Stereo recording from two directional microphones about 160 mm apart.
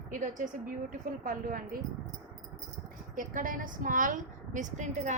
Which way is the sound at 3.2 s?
55° right (ahead or behind).